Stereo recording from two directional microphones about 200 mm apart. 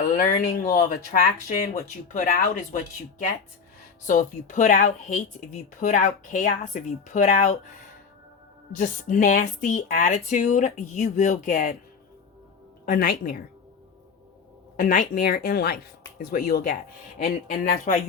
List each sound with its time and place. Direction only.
0.0 s speech: 40° left (ahead or behind)
8.7 s speech: 40° left (ahead or behind)
12.8 s speech: 45° left (ahead or behind)
14.8 s speech: 45° left (ahead or behind)